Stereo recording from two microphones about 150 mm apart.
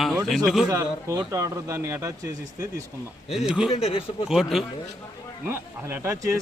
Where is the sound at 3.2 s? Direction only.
5° right (ahead or behind).